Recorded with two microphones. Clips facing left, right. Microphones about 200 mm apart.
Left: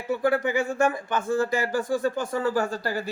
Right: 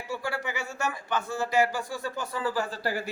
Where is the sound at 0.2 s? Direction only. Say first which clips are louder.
Left 10 dB; 50° left (ahead or behind).